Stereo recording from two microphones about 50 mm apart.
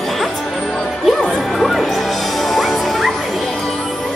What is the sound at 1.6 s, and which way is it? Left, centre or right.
Music, centre.